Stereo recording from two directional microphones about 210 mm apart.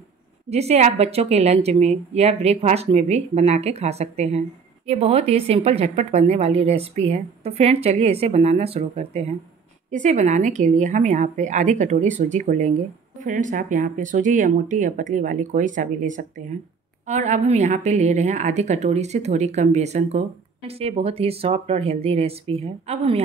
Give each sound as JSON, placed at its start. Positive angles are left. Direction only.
{"t": 0.5, "sound": "a woman's voice", "side_deg": -30}